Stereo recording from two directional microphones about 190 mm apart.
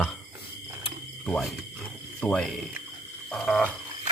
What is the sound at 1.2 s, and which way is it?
Speech, 5° left (ahead or behind).